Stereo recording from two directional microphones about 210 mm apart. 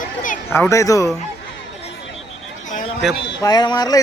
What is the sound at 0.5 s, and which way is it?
Speech, 15° left (ahead or behind).